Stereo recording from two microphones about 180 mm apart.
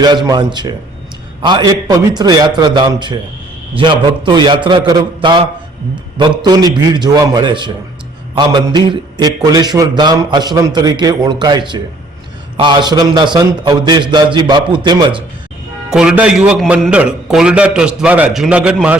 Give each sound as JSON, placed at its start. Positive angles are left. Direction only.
{"t": 0.3, "sound": "a man's voice", "side_deg": -25}
{"t": 15.9, "sound": "a man's voice", "side_deg": -5}